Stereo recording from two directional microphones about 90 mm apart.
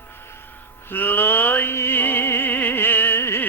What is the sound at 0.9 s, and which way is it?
Music, 20° left (ahead or behind).